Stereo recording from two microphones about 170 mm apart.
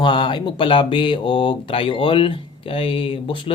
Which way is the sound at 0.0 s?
30° left (ahead or behind).